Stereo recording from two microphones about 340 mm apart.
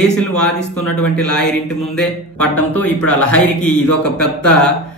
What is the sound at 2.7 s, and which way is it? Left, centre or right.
Speech, centre.